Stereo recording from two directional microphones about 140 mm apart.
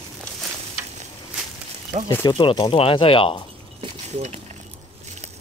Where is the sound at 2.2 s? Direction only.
35° left (ahead or behind).